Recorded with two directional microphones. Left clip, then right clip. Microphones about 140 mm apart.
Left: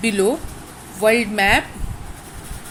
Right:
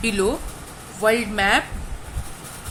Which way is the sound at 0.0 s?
25° left (ahead or behind).